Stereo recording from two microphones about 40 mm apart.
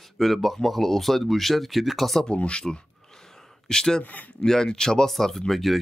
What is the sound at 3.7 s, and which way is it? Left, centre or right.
Speech, centre.